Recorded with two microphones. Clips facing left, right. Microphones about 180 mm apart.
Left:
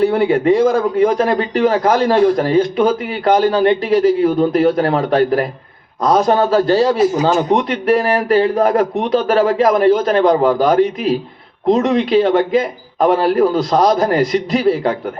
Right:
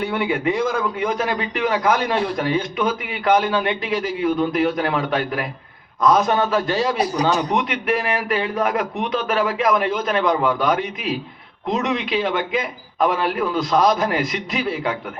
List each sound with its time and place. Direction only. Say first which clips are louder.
0.0 s a man's voice: left 8 dB; 35° left (ahead or behind)